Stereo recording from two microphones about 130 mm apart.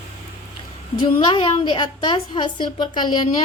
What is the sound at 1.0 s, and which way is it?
A woman's voice, 40° left (ahead or behind).